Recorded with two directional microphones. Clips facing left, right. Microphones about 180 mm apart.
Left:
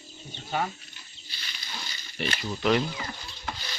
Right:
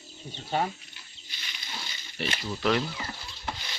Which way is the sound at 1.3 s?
20° right (ahead or behind).